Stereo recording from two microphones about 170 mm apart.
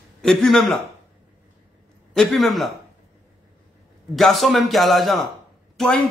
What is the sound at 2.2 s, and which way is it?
Speech, centre (ahead or behind).